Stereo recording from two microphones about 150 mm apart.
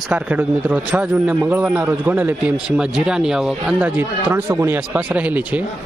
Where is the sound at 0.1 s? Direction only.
10° right (ahead or behind).